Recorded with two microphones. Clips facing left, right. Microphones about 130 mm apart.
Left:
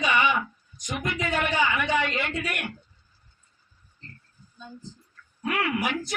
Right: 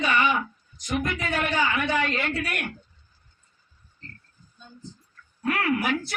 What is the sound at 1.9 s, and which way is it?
Speech, 50° right (ahead or behind).